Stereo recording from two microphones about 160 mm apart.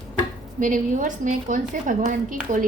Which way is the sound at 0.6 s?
55° right (ahead or behind).